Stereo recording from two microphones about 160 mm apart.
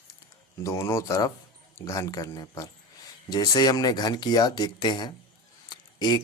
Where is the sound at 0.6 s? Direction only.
20° left (ahead or behind).